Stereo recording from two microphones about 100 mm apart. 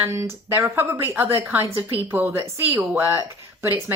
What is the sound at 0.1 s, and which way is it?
A woman's voice, 30° right (ahead or behind).